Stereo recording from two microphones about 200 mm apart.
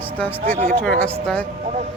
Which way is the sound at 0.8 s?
5° left (ahead or behind).